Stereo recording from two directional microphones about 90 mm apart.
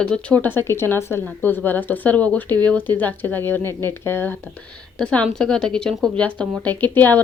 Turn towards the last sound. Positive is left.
turn(degrees=20)  # may be behind; listen again after turning